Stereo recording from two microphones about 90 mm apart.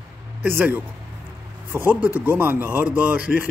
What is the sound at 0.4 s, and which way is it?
Speech, 20° right (ahead or behind).